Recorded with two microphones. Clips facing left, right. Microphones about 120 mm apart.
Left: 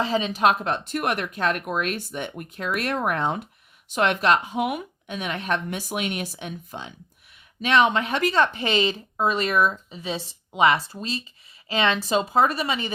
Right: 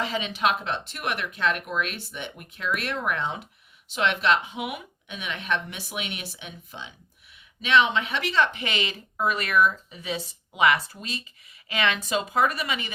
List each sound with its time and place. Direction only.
0.0 s speech: 35° left (ahead or behind)